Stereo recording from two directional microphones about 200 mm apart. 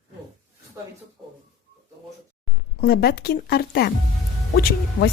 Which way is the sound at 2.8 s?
50° left (ahead or behind).